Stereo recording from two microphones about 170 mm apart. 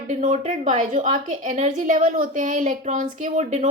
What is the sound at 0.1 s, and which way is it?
A woman's voice, 45° right (ahead or behind).